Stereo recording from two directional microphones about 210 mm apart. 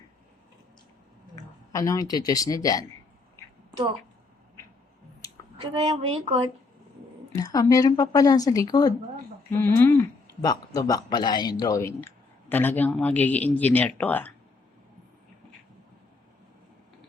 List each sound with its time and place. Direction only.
1.7 s speech: 15° left (ahead or behind)
5.8 s speech: 25° right (ahead or behind)
7.3 s speech: 15° left (ahead or behind)